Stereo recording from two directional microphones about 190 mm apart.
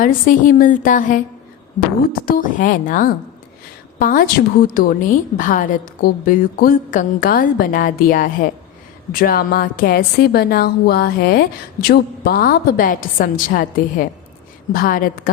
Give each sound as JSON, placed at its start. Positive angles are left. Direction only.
{"t": 0.0, "sound": "a woman's voice", "side_deg": 45}